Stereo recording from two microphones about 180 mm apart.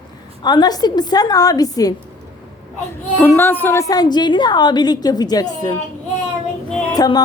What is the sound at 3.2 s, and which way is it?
A woman's voice, 10° left (ahead or behind).